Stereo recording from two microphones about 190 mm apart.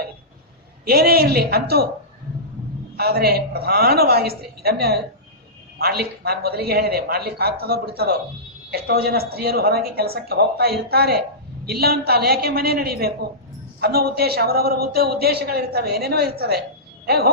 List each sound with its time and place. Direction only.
0.9 s a woman's voice: 55° right (ahead or behind)
3.0 s a woman's voice: 55° right (ahead or behind)